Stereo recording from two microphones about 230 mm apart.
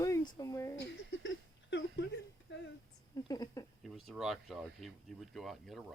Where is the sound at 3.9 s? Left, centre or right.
Centre.